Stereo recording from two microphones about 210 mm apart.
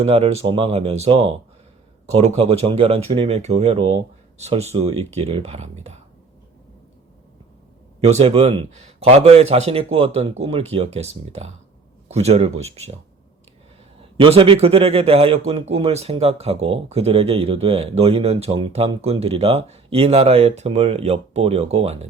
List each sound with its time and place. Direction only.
0.0 s speech: 30° right (ahead or behind)
8.0 s speech: 30° right (ahead or behind)
14.0 s speech: 25° right (ahead or behind)